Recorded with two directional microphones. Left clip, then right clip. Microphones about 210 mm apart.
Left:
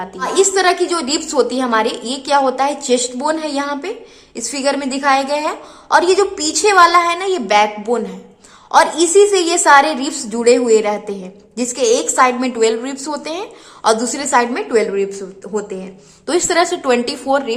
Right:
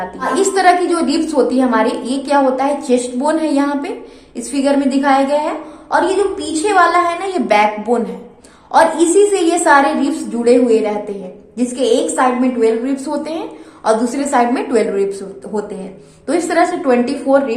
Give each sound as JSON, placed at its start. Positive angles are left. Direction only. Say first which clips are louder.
{"t": 0.2, "sound": "a woman's voice", "louder": "even", "side_deg": 25}
{"t": 16.2, "sound": "a woman's voice", "louder": "right 1 dB", "side_deg": 25}